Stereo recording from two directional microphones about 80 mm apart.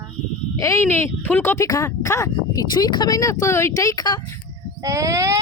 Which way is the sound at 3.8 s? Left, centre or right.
Left.